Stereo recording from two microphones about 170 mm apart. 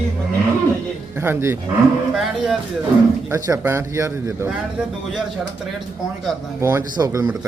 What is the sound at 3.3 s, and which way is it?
A man's voice, 15° right (ahead or behind).